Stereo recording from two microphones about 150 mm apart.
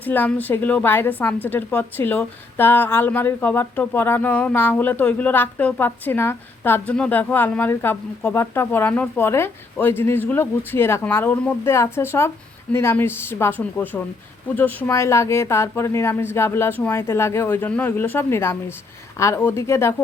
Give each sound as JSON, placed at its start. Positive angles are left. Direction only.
{"t": 0.0, "sound": "a woman's voice", "side_deg": 10}